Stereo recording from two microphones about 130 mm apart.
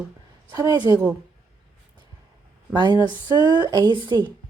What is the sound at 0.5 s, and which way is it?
Speech, 30° right (ahead or behind).